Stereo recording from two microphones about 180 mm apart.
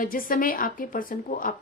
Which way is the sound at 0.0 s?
50° left (ahead or behind).